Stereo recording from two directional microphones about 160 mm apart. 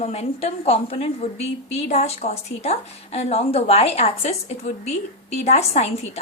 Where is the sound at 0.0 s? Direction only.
45° left (ahead or behind).